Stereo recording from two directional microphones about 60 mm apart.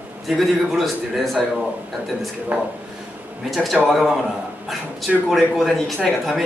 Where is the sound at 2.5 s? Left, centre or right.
Right.